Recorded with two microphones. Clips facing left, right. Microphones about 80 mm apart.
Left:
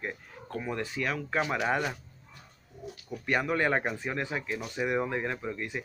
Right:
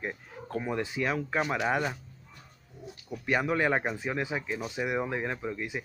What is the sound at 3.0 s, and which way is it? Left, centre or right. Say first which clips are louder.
Speech: right 1 dB; centre.